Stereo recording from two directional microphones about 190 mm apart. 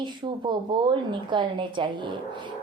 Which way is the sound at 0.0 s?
25° right (ahead or behind).